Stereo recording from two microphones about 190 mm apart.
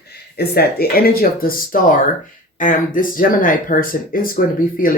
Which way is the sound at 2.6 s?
45° left (ahead or behind).